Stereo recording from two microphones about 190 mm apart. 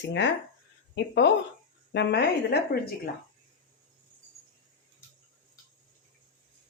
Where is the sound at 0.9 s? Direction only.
65° left (ahead or behind).